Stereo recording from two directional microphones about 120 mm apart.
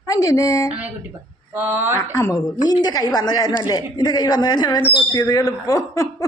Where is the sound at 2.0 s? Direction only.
30° left (ahead or behind).